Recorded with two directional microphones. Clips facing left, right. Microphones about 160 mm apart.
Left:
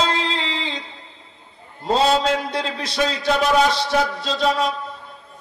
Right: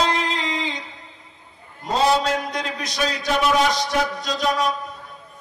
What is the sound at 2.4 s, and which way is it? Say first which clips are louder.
Speech: left 2 dB; 30° left (ahead or behind).